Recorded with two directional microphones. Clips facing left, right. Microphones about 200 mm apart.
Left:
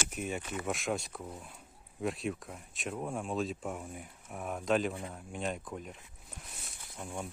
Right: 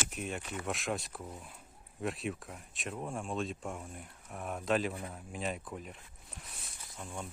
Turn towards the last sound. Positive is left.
turn(degrees=10)  # may be behind; listen again after turning